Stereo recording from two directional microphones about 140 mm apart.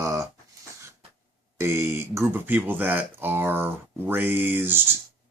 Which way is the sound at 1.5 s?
20° right (ahead or behind).